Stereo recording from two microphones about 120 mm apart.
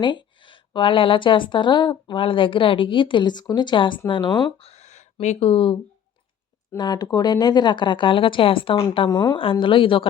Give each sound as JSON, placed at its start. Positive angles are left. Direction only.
{"t": 0.0, "sound": "a woman's voice", "side_deg": 40}
{"t": 4.6, "sound": "a sound", "side_deg": 65}
{"t": 5.2, "sound": "speech", "side_deg": 65}
{"t": 6.7, "sound": "speech", "side_deg": 35}
{"t": 8.8, "sound": "speech", "side_deg": 35}
{"t": 9.4, "sound": "a woman's voice", "side_deg": 45}